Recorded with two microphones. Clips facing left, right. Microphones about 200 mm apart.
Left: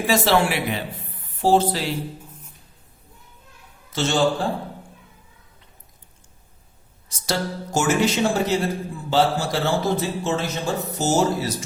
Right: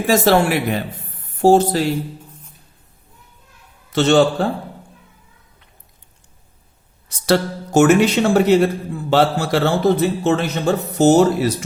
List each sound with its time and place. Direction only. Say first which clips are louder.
0.1 s speech: right 5 dB; 50° right (ahead or behind)
3.9 s a man's voice: right 9 dB; 60° right (ahead or behind)
7.1 s a man's voice: right 8 dB; 65° right (ahead or behind)